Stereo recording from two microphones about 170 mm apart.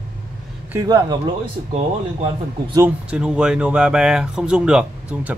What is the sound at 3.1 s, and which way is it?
Speech, 5° right (ahead or behind).